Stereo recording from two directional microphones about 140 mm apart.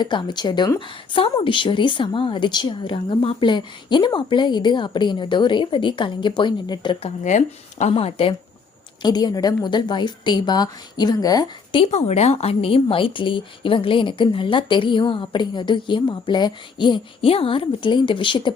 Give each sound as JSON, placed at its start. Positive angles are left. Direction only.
{"t": 0.0, "sound": "speech", "side_deg": 35}
{"t": 7.3, "sound": "speech", "side_deg": 60}
{"t": 7.9, "sound": "speech", "side_deg": 40}
{"t": 9.0, "sound": "a woman's voice", "side_deg": 30}
{"t": 11.9, "sound": "speech", "side_deg": 50}